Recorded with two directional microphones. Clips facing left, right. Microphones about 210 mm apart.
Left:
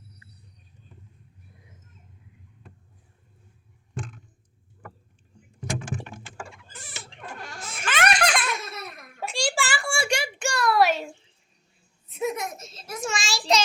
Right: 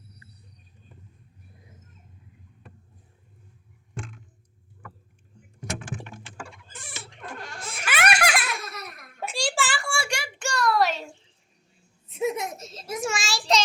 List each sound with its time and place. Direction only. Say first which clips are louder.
7.9 s baby laughter: left 1 dB; 10° right (ahead or behind)
8.6 s laughter: left 1 dB; 25° left (ahead or behind)
9.2 s a sound: even; centre (ahead or behind)
9.9 s a sound: left 4 dB; 20° left (ahead or behind)
12.1 s giggle: right 1 dB; 25° right (ahead or behind)
13.0 s child singing: even; 5° right (ahead or behind)